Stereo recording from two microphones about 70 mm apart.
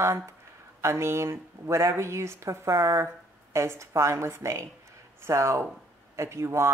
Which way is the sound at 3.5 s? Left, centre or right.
Right.